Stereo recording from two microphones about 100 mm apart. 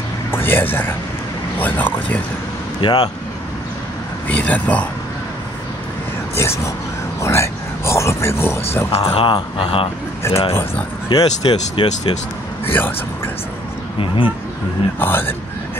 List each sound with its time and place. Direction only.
0.3 s speech: 20° left (ahead or behind)
2.8 s speech: 45° left (ahead or behind)
4.3 s speech: 15° left (ahead or behind)
6.3 s speech: 25° left (ahead or behind)
7.2 s a sound: 30° left (ahead or behind)
8.9 s speech: 60° left (ahead or behind)
10.2 s speech: 25° left (ahead or behind)
11.1 s speech: 45° left (ahead or behind)
11.4 s speech: 60° left (ahead or behind)
12.6 s speech: 20° left (ahead or behind)
13.9 s speech: 55° left (ahead or behind)
15.0 s speech: 20° left (ahead or behind)